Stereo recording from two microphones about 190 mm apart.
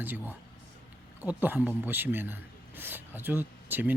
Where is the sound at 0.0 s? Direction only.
10° right (ahead or behind).